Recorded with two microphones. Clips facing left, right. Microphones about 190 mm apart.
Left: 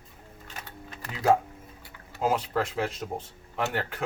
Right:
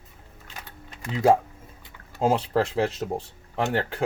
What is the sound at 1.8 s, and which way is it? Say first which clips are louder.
Speech: right 4 dB; 30° right (ahead or behind).